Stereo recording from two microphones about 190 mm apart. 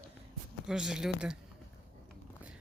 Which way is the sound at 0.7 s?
5° right (ahead or behind).